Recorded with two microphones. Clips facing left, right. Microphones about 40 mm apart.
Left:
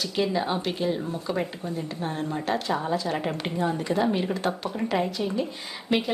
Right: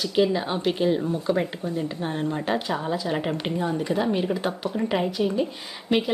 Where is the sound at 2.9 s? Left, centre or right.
Right.